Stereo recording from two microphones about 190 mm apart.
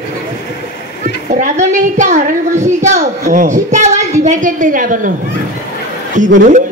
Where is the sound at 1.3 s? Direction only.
40° right (ahead or behind).